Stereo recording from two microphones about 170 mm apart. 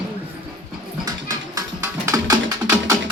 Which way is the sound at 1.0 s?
20° right (ahead or behind).